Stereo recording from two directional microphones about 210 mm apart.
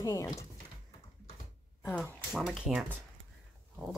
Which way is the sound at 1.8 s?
10° left (ahead or behind).